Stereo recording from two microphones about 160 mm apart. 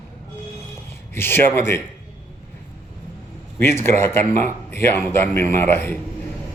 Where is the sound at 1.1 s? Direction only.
15° left (ahead or behind).